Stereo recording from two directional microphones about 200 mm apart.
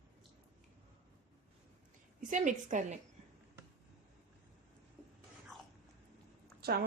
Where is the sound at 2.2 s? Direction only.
40° right (ahead or behind).